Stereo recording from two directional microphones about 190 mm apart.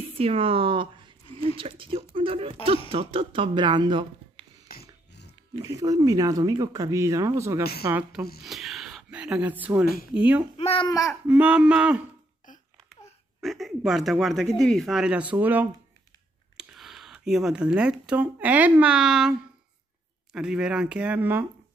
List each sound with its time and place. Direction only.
0.2 s speech: 30° right (ahead or behind)
4.6 s dog: 60° left (ahead or behind)
5.6 s speech: 20° right (ahead or behind)
10.6 s a child's voice: 30° left (ahead or behind)
10.9 s speech: 15° left (ahead or behind)
11.2 s speech: 5° right (ahead or behind)
13.4 s speech: centre (ahead or behind)
20.3 s speech: 5° right (ahead or behind)